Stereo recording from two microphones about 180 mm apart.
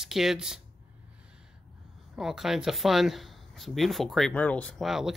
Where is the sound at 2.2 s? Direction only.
Centre (ahead or behind).